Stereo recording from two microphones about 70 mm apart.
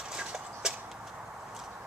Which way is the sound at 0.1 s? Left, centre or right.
Centre.